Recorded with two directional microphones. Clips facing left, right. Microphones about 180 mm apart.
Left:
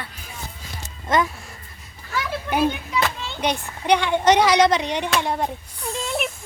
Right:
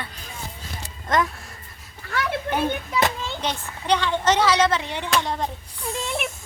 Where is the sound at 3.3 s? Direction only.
15° left (ahead or behind).